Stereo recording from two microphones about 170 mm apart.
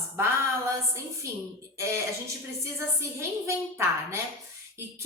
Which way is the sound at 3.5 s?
15° right (ahead or behind).